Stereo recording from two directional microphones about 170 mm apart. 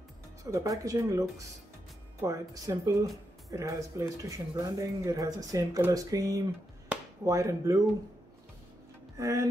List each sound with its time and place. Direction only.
0.4 s speech: 20° right (ahead or behind)
9.1 s speech: 20° right (ahead or behind)